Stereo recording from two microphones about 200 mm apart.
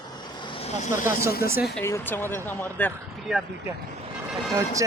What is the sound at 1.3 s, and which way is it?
Speech, 50° left (ahead or behind).